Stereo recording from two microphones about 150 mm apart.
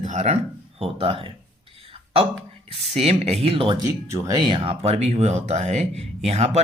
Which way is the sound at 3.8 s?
20° right (ahead or behind).